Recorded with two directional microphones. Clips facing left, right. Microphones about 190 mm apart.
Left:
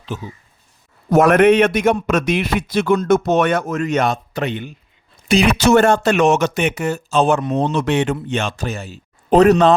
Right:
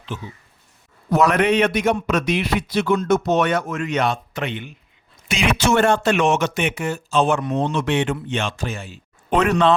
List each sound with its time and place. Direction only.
0.1 s a man's voice: 40° left (ahead or behind)
1.1 s a man's voice: 50° left (ahead or behind)